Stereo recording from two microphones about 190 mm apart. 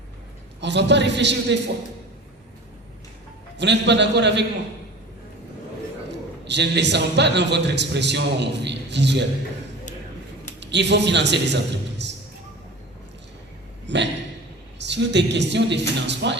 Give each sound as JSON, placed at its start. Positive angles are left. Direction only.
{"t": 0.6, "sound": "speech", "side_deg": -65}
{"t": 3.6, "sound": "a man's voice", "side_deg": -65}
{"t": 6.1, "sound": "a man's voice", "side_deg": -65}
{"t": 10.6, "sound": "a man's voice", "side_deg": -65}
{"t": 13.8, "sound": "a man's voice", "side_deg": -65}